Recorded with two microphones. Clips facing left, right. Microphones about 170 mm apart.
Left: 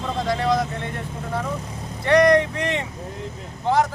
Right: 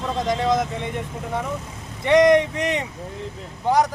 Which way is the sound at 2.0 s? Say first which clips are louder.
Right 1 dB; 20° right (ahead or behind).